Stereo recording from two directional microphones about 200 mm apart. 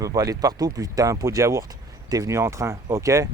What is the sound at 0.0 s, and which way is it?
Speech, 20° right (ahead or behind).